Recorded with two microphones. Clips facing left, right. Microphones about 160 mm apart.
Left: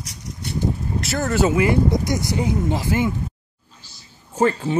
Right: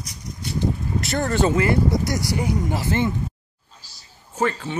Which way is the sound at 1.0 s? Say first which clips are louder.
Left 1 dB; 5° left (ahead or behind).